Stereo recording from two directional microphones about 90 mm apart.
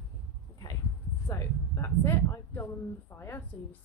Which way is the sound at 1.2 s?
30° left (ahead or behind).